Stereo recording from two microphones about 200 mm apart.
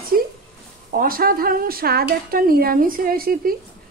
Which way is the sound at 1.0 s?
45° right (ahead or behind).